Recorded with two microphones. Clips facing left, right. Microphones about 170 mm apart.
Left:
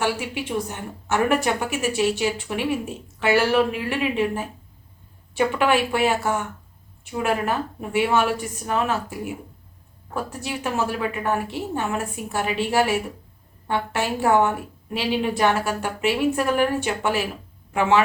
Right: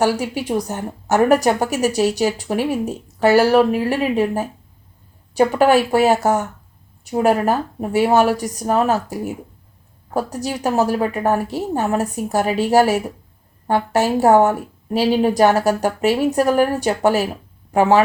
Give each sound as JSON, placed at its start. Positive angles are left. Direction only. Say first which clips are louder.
{"t": 0.0, "sound": "a woman's voice", "louder": "right 6 dB", "side_deg": -40}